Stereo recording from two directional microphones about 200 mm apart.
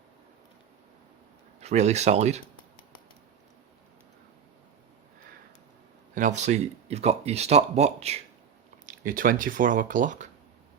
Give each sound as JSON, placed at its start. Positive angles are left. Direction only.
{"t": 1.6, "sound": "speech", "side_deg": -35}
{"t": 6.1, "sound": "speech", "side_deg": -35}
{"t": 8.9, "sound": "speech", "side_deg": -45}